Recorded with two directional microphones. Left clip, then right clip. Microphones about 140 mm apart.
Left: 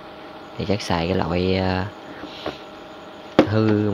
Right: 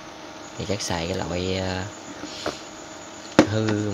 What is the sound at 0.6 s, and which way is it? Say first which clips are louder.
Speech: left 4 dB; 20° left (ahead or behind).